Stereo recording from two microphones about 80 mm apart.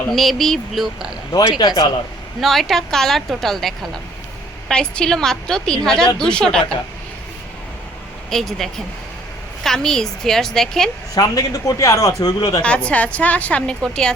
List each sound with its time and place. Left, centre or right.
0.1 s speech: centre
1.5 s a man's voice: left
2.4 s a woman's voice: centre
8.3 s speech: centre
11.1 s a man's voice: left
12.6 s a woman's voice: centre